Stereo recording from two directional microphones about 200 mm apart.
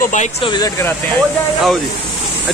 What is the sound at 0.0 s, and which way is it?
Speech, 40° left (ahead or behind).